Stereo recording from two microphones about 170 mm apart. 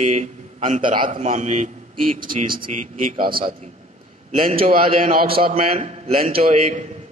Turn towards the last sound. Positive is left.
turn(degrees=-40)  # may be behind; listen again after turning